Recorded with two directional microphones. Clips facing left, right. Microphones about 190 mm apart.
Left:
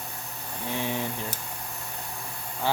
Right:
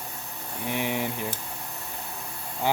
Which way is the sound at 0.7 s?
15° right (ahead or behind).